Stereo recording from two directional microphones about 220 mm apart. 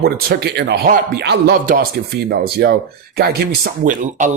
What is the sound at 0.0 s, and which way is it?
Speech, 45° right (ahead or behind).